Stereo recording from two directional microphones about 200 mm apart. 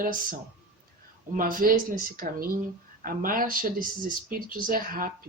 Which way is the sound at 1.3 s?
45° right (ahead or behind).